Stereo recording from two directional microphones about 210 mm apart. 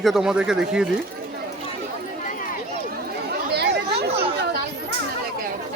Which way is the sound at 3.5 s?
50° right (ahead or behind).